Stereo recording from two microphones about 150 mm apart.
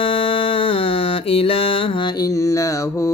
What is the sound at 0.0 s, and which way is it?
Mantra, 40° left (ahead or behind).